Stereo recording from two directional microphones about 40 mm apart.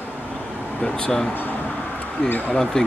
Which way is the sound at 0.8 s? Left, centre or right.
Centre.